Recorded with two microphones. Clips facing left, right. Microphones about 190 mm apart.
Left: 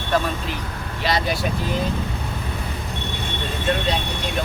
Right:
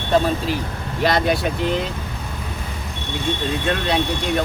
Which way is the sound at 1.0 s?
55° right (ahead or behind).